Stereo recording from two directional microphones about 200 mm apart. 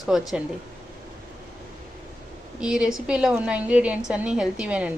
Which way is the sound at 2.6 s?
5° right (ahead or behind).